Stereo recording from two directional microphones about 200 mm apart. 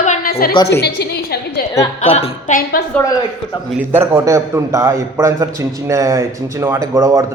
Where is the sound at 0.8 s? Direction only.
55° left (ahead or behind).